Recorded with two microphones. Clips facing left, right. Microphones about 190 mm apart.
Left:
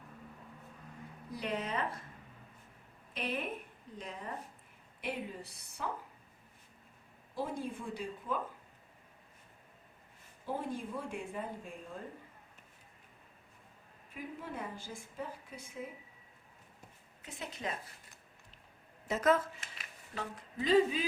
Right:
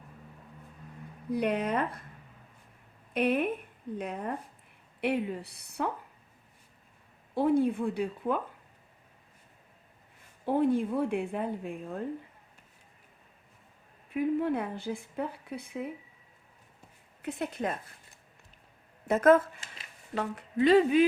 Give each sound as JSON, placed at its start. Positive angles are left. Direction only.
{"t": 1.3, "sound": "a woman's voice", "side_deg": -60}
{"t": 3.1, "sound": "a woman's voice", "side_deg": -60}
{"t": 7.3, "sound": "a woman's voice", "side_deg": -60}
{"t": 10.4, "sound": "a woman's voice", "side_deg": -60}
{"t": 14.1, "sound": "a woman's voice", "side_deg": -65}
{"t": 17.2, "sound": "a woman's voice", "side_deg": -60}
{"t": 19.0, "sound": "speech", "side_deg": -55}
{"t": 20.1, "sound": "speech", "side_deg": -65}